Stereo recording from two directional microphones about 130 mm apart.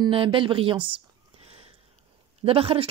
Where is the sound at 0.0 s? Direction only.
40° right (ahead or behind).